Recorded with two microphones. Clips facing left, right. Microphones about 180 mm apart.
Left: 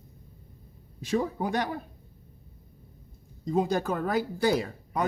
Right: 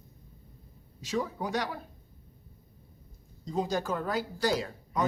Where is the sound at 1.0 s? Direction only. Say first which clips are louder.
Left 4 dB; 55° left (ahead or behind).